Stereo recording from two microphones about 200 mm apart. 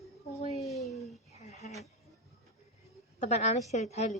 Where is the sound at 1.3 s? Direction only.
35° left (ahead or behind).